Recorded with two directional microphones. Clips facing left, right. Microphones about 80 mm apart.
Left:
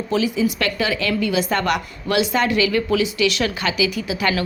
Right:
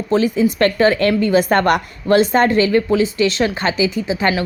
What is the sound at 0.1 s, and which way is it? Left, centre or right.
A woman's voice, right.